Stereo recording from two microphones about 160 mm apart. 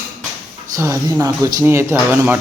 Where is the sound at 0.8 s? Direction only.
20° right (ahead or behind).